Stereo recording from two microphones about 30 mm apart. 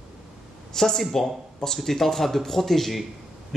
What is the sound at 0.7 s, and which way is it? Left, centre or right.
Speech, centre.